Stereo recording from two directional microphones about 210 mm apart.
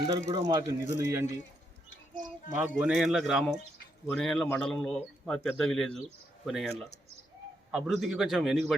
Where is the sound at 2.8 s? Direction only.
Centre (ahead or behind).